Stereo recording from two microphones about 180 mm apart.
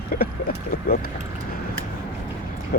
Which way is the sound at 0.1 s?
55° left (ahead or behind).